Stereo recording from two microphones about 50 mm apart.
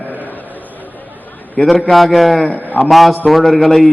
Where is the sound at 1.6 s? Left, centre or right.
Left.